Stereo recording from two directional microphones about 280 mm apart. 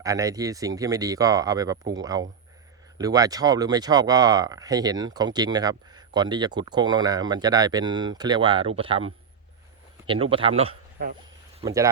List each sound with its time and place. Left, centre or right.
0.0 s speech: centre
10.1 s speech: centre
11.5 s speech: centre